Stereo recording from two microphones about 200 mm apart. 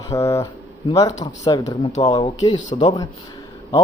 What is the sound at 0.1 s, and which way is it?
A man's voice, 15° left (ahead or behind).